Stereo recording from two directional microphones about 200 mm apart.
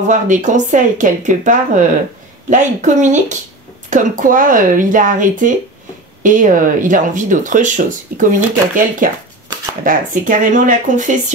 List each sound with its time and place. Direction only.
0.1 s speech: 40° right (ahead or behind)